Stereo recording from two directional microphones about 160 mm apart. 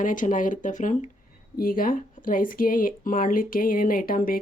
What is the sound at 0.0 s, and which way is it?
Speech, 55° left (ahead or behind).